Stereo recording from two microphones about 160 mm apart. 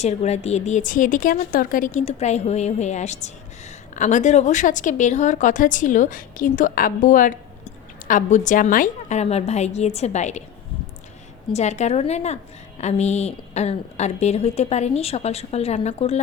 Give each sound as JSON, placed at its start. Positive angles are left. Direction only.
{"t": 0.0, "sound": "a woman's voice", "side_deg": 45}
{"t": 11.5, "sound": "a woman's voice", "side_deg": 45}